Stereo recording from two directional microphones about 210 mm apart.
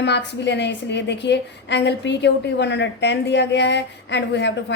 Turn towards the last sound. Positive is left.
turn(degrees=55)  # may be behind; listen again after turning